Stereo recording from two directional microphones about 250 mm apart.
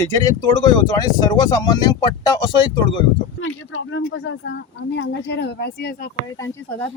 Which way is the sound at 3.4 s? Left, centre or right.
Left.